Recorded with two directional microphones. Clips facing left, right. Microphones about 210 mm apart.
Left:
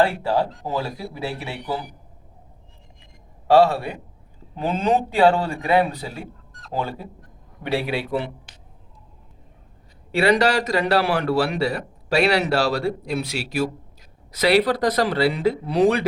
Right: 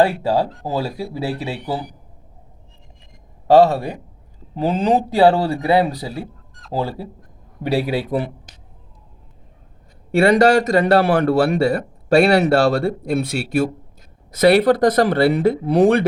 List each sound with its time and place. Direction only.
0.0 s speech: 15° right (ahead or behind)
0.6 s speech: 35° right (ahead or behind)
3.4 s speech: 40° right (ahead or behind)
7.6 s speech: 40° right (ahead or behind)
10.1 s a man's voice: 50° right (ahead or behind)